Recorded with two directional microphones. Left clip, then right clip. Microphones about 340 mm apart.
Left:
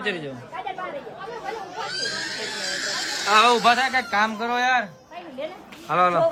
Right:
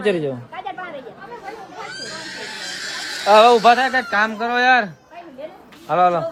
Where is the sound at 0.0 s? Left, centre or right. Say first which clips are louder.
Right 8 dB; centre.